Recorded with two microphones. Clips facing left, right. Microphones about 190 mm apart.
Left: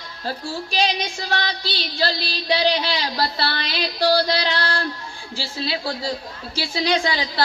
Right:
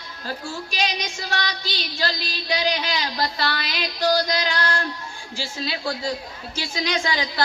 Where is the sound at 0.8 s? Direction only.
35° left (ahead or behind).